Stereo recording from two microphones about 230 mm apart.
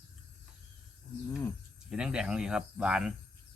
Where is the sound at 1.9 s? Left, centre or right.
Centre.